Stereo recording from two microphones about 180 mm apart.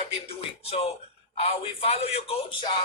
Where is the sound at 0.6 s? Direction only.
35° left (ahead or behind).